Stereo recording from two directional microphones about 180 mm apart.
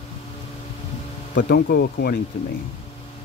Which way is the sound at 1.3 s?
60° left (ahead or behind).